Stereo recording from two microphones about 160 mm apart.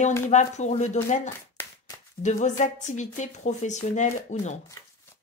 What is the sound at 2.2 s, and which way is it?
A woman's voice, 50° left (ahead or behind).